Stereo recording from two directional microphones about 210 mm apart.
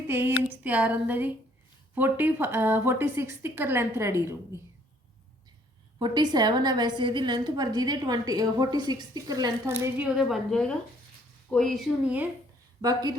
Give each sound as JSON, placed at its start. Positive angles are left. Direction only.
{"t": 0.1, "sound": "a woman's voice", "side_deg": -10}
{"t": 6.0, "sound": "a woman's voice", "side_deg": -20}
{"t": 10.2, "sound": "speech", "side_deg": 0}
{"t": 12.8, "sound": "a woman's voice", "side_deg": -20}